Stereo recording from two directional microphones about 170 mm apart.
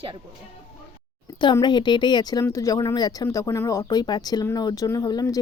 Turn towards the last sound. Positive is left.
turn(degrees=25)  # may be behind; listen again after turning